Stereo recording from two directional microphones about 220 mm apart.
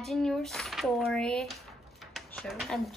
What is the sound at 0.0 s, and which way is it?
Speech, centre (ahead or behind).